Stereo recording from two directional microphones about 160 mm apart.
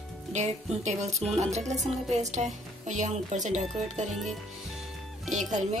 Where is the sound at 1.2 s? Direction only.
40° right (ahead or behind).